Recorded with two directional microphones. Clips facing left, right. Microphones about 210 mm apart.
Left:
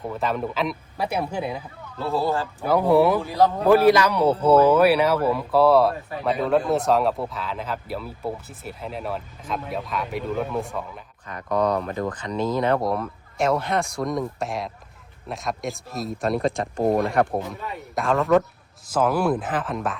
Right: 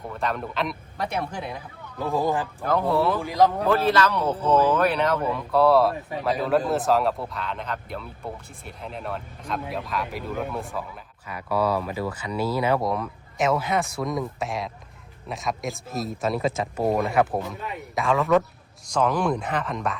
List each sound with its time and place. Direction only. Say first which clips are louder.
0.1 s speech: left 2 dB; centre (ahead or behind)
2.0 s speech: even; 15° right (ahead or behind)
2.6 s speech: left 5 dB; 10° left (ahead or behind)
3.2 s speech: even; 15° right (ahead or behind)
3.7 s speech: left 5 dB; 10° left (ahead or behind)